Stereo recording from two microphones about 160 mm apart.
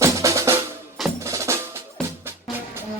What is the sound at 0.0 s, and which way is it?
Music, 20° right (ahead or behind).